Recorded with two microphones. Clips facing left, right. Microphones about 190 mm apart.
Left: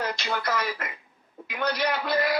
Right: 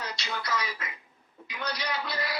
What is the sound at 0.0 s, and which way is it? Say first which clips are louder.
A man's voice: left 7 dB; 50° left (ahead or behind).